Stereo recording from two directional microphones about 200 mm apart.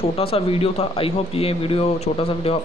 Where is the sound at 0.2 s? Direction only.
30° left (ahead or behind).